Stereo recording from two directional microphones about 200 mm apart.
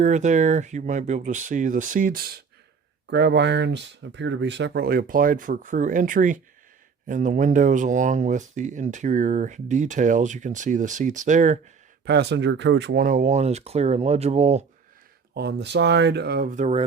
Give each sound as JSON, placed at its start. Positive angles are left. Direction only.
{"t": 0.0, "sound": "speech", "side_deg": -35}
{"t": 3.1, "sound": "speech", "side_deg": -60}
{"t": 12.0, "sound": "speech", "side_deg": -55}
{"t": 13.0, "sound": "speech", "side_deg": -40}
{"t": 15.4, "sound": "speech", "side_deg": -55}